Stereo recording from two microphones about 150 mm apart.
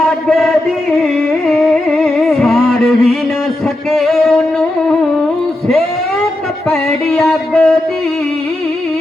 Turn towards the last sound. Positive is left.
turn(degrees=5)  # may be behind; listen again after turning